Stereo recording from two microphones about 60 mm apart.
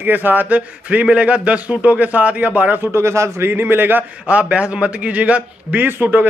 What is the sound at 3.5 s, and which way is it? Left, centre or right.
Speech, right.